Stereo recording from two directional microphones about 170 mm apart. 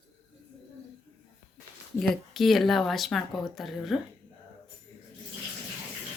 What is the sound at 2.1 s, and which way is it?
Speech, centre (ahead or behind).